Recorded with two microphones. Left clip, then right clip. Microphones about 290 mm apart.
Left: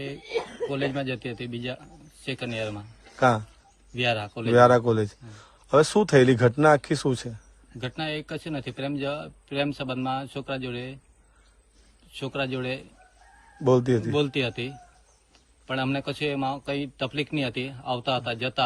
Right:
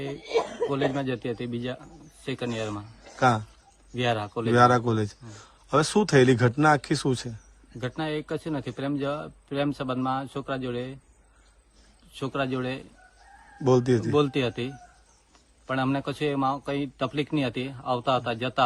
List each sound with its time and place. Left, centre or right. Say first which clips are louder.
0.2 s chuckle: right 6 dB; right
0.7 s a man's voice: right 1 dB; centre
12.1 s a man's voice: right 1 dB; centre
14.2 s a man's voice: right 1 dB; centre